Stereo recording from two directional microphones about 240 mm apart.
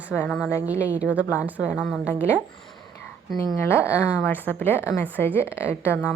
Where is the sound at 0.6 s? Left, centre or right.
Centre.